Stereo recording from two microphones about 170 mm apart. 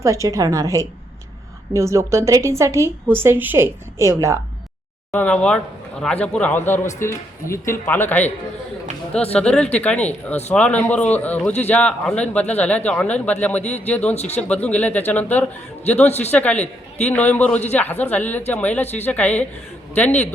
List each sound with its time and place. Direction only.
0.0 s a woman's voice: 20° right (ahead or behind)
5.1 s a man's voice: 10° left (ahead or behind)
9.3 s a man's voice: 5° left (ahead or behind)
14.2 s speech: 40° left (ahead or behind)
14.4 s a man's voice: 10° left (ahead or behind)